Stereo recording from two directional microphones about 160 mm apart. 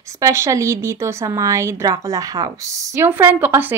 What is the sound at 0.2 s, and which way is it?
A woman's voice, 20° right (ahead or behind).